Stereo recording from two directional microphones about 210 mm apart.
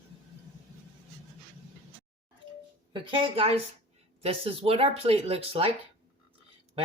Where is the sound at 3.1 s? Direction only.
25° right (ahead or behind).